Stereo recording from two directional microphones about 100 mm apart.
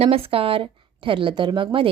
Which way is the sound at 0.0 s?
75° right (ahead or behind).